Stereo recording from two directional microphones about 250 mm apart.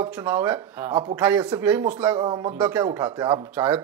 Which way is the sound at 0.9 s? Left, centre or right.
Right.